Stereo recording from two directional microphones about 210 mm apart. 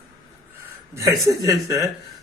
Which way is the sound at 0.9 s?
15° right (ahead or behind).